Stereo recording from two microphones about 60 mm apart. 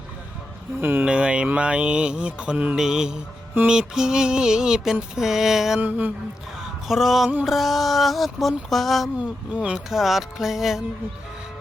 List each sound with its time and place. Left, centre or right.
0.8 s speech: right
1.0 s mantra: centre
2.7 s mantra: centre
6.6 s a sound: centre
9.1 s speech: right
9.7 s a sound: centre